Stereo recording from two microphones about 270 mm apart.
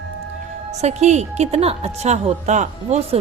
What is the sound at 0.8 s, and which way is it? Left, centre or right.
A woman's voice, right.